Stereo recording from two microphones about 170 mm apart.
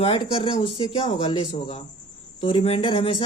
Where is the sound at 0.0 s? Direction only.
30° left (ahead or behind).